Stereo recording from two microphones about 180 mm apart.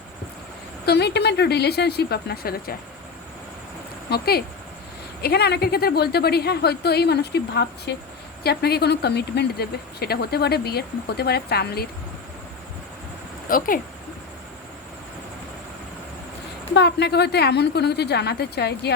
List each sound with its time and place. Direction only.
0.9 s speech: 65° left (ahead or behind)
4.1 s speech: 60° left (ahead or behind)
13.5 s speech: 50° left (ahead or behind)
16.7 s a woman's voice: 65° left (ahead or behind)